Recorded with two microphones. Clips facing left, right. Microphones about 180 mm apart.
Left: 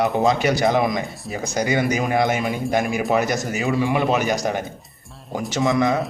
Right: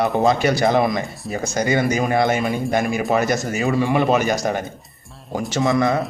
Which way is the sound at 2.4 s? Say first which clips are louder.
Right 1 dB; centre (ahead or behind).